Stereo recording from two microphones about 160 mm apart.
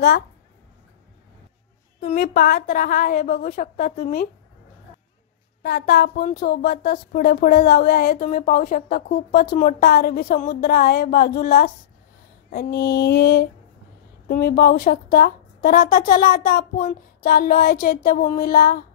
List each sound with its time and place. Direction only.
2.0 s a woman's voice: 60° left (ahead or behind)
5.6 s speech: 90° left; by 11.7 s 75° left (ahead or behind)
12.4 s a sound: 80° left
14.2 s a woman's voice: 70° left (ahead or behind)